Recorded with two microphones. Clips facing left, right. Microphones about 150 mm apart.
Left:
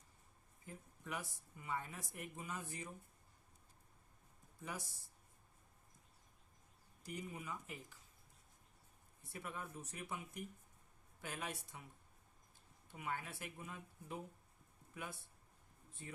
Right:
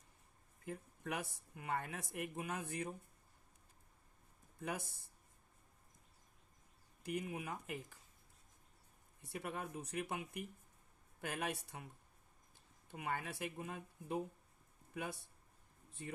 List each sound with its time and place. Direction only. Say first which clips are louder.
0.6 s speech: right 7 dB; 70° right (ahead or behind)
4.6 s speech: right 5 dB; 60° right (ahead or behind)
7.0 s speech: right 6 dB; 65° right (ahead or behind)
9.2 s speech: right 4 dB; 70° right (ahead or behind)
12.9 s speech: right 3 dB; 75° right (ahead or behind)